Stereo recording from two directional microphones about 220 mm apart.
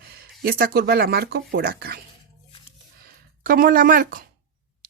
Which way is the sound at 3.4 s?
40° right (ahead or behind).